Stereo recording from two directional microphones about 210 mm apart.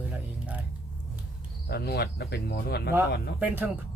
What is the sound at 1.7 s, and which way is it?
Speech, 50° left (ahead or behind).